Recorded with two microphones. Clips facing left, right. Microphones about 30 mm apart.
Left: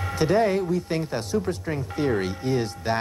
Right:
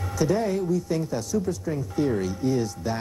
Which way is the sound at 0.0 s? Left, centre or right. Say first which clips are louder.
Left 3 dB; left.